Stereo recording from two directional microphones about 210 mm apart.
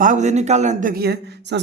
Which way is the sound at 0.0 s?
35° right (ahead or behind).